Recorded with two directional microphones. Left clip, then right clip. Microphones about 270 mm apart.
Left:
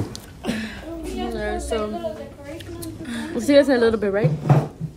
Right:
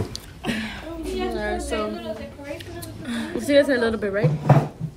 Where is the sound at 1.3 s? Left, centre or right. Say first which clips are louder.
Left 1 dB; centre.